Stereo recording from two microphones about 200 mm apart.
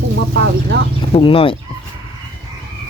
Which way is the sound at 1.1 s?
25° left (ahead or behind).